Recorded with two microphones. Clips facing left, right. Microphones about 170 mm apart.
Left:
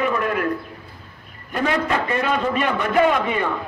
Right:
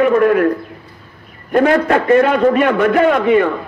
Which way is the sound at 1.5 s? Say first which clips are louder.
Right 9 dB; 55° right (ahead or behind).